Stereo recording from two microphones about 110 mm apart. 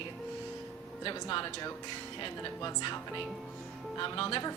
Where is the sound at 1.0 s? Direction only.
50° left (ahead or behind).